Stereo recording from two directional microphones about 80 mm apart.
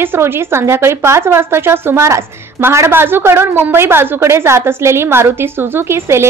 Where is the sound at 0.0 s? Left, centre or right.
Right.